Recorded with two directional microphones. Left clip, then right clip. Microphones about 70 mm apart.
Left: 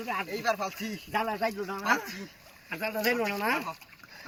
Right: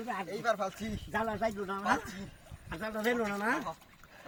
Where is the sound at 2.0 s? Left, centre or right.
Left.